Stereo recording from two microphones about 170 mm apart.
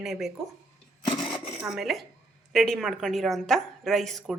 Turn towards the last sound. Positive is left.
turn(degrees=0)  # may be behind; listen again after turning